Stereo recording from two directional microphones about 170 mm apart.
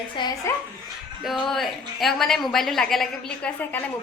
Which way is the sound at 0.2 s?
25° left (ahead or behind).